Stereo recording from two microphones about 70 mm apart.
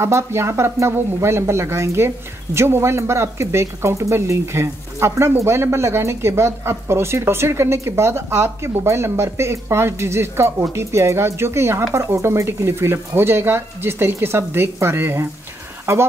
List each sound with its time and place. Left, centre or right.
0.0 s speech: right